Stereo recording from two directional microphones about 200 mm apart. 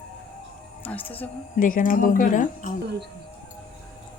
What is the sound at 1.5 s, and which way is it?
Speech, 45° left (ahead or behind).